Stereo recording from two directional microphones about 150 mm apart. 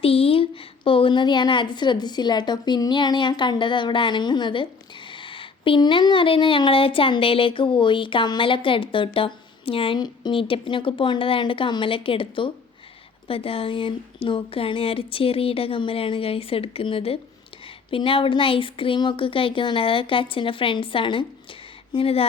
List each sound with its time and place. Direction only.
0.0 s a woman's voice: 40° left (ahead or behind)